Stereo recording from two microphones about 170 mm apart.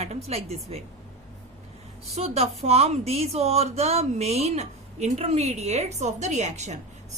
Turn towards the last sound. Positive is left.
turn(degrees=-45)  # may be behind; listen again after turning